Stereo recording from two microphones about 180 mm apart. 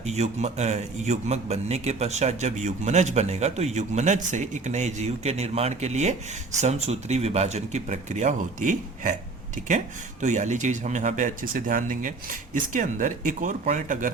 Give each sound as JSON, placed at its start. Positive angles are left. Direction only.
{"t": 0.0, "sound": "a man's voice", "side_deg": -35}